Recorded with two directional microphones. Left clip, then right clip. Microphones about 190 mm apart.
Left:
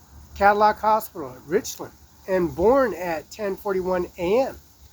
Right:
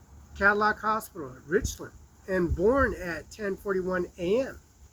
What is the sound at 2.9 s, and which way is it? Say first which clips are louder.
Speech: left 7 dB; 20° right (ahead or behind).